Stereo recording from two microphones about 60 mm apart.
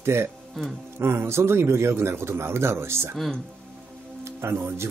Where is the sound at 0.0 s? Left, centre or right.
Right.